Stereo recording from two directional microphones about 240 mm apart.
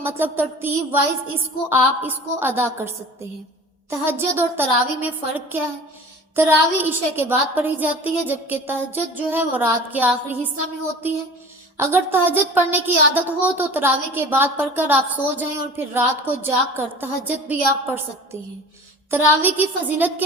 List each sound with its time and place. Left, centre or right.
0.0 s a woman's voice: centre
11.8 s a woman's voice: centre